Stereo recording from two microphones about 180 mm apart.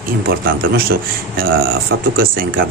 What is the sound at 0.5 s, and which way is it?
Speech, 55° right (ahead or behind).